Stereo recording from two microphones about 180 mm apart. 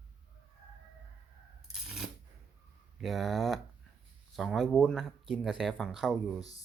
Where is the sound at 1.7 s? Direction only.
Centre (ahead or behind).